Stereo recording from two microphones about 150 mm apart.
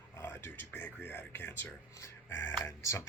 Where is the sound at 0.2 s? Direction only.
15° left (ahead or behind).